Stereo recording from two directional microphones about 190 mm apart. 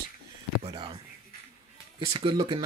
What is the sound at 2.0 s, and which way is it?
Speech, 20° right (ahead or behind).